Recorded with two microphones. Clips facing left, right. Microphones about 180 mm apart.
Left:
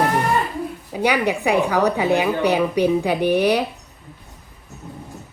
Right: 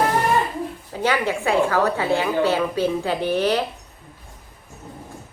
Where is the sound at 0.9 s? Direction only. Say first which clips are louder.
Left 2 dB; 15° left (ahead or behind).